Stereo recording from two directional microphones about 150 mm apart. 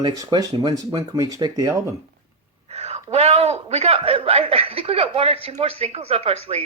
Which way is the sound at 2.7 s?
45° right (ahead or behind).